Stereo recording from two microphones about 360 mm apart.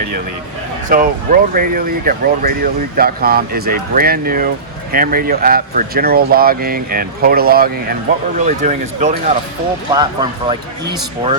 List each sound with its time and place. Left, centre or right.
0.9 s speech: right